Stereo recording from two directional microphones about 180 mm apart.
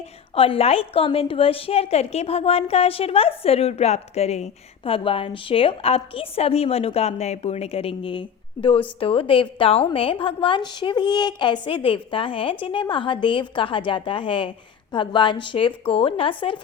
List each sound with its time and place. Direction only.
0.3 s a woman's voice: 30° left (ahead or behind)